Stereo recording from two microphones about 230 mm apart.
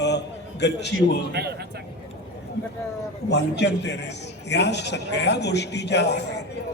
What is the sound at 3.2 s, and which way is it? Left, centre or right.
A man's voice, left.